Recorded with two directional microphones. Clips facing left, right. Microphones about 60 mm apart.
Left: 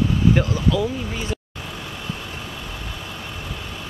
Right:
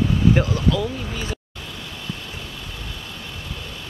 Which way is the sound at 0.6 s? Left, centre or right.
Centre.